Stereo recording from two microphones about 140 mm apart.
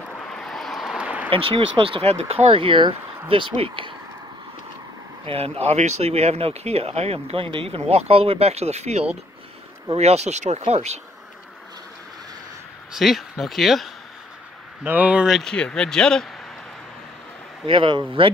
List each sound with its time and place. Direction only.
0.3 s vehicle: 5° left (ahead or behind)
1.3 s speech: 40° right (ahead or behind)
5.2 s speech: 45° right (ahead or behind)
12.9 s speech: centre (ahead or behind)
14.8 s speech: 10° right (ahead or behind); by 16.3 s 5° left (ahead or behind)
17.6 s speech: 35° right (ahead or behind)